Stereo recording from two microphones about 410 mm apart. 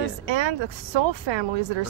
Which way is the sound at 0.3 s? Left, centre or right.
Right.